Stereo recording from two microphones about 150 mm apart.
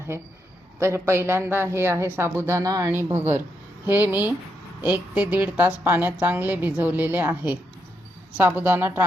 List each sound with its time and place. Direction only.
0.8 s a woman's voice: 15° right (ahead or behind)